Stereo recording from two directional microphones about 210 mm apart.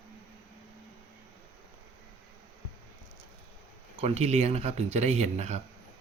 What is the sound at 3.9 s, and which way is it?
Speech, 30° right (ahead or behind).